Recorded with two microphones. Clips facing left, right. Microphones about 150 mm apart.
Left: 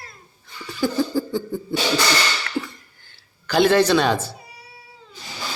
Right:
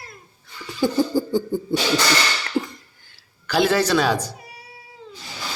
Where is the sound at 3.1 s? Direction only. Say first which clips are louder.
Left 2 dB; 5° right (ahead or behind).